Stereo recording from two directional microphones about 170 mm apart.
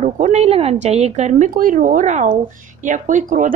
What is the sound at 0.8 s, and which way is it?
A woman's voice, 40° right (ahead or behind).